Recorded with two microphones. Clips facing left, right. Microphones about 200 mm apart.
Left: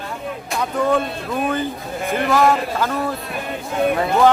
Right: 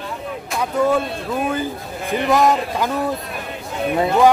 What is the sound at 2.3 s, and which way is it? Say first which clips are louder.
Speech: right 1 dB; 20° right (ahead or behind).